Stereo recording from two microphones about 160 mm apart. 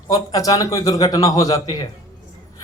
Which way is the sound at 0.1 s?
20° left (ahead or behind).